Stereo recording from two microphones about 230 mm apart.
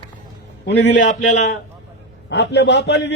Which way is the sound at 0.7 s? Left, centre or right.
Left.